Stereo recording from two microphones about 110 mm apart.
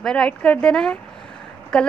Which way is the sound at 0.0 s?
5° left (ahead or behind).